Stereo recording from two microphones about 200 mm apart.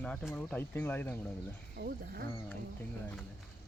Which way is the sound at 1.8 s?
50° right (ahead or behind).